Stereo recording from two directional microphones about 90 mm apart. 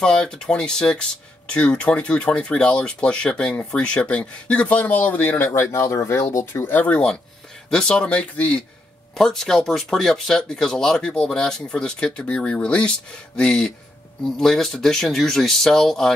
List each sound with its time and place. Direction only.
0.0 s speech: 10° left (ahead or behind); by 6.6 s 35° left (ahead or behind)
6.6 s speech: 20° left (ahead or behind)